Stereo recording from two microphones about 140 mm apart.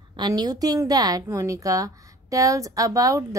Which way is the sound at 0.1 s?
30° right (ahead or behind).